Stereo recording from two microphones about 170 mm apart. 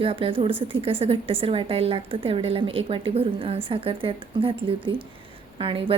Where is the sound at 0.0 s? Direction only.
30° right (ahead or behind).